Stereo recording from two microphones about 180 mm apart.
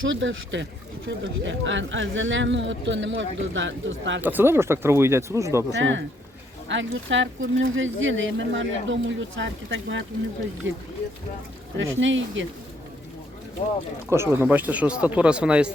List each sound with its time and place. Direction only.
0.0 s speech: 90° right
4.2 s speech: 10° right (ahead or behind)
5.7 s speech: 90° right
11.8 s speech: 90° right
14.1 s speech: 15° right (ahead or behind)